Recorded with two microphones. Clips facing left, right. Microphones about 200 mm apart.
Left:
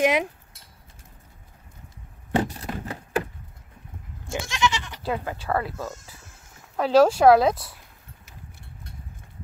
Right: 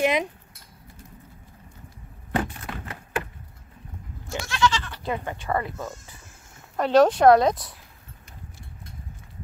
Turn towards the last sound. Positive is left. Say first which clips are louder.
# even
turn(degrees=5)  # may be behind; listen again after turning